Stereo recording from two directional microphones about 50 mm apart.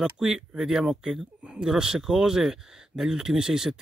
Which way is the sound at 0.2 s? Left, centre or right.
Centre.